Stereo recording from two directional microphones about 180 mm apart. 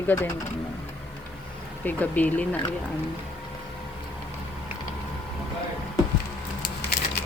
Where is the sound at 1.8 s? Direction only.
10° left (ahead or behind).